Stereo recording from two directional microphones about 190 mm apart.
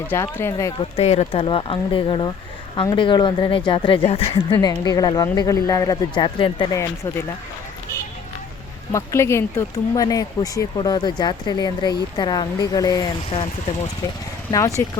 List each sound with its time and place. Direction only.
0.1 s speech: 10° left (ahead or behind)
0.9 s speech: 35° left (ahead or behind)
8.9 s speech: 15° left (ahead or behind)
14.8 s speech: 10° left (ahead or behind)